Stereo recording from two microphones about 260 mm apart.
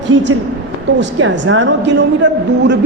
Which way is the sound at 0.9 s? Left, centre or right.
Right.